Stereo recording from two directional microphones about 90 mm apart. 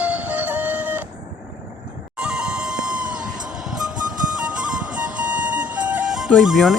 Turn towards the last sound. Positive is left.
turn(degrees=0)  # may be behind; listen again after turning